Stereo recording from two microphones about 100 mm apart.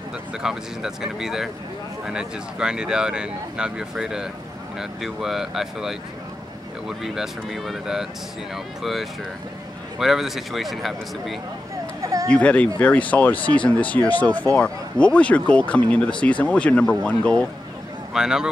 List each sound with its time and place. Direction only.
0.4 s speech: 5° right (ahead or behind)
9.9 s speech: 5° right (ahead or behind)
12.0 s a sound: 35° right (ahead or behind)
12.3 s speech: 15° left (ahead or behind)
18.1 s speech: 5° right (ahead or behind)